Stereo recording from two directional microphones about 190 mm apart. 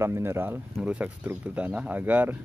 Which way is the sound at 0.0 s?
15° right (ahead or behind).